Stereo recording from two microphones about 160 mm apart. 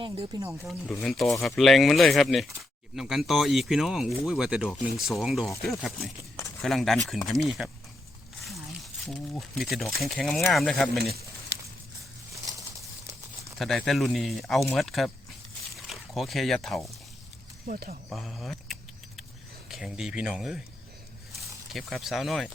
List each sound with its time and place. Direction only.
0.3 s speech: 15° right (ahead or behind)
1.0 s speech: centre (ahead or behind)
12.3 s a sound: 20° right (ahead or behind)
13.6 s speech: centre (ahead or behind)
17.7 s speech: 65° right (ahead or behind)
18.1 s keys jangling: centre (ahead or behind)
19.7 s speech: 5° right (ahead or behind)
21.7 s speech: centre (ahead or behind)